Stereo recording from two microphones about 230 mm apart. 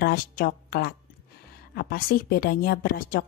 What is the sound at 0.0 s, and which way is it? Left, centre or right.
A woman's voice, left.